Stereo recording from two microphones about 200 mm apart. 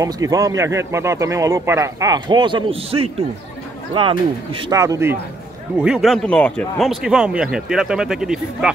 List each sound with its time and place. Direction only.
0.0 s speech: 15° right (ahead or behind)